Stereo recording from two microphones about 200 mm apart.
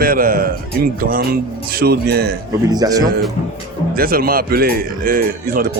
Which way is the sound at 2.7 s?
20° right (ahead or behind).